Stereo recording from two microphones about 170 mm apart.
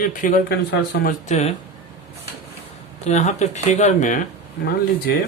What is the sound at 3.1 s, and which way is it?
Speech, 40° left (ahead or behind).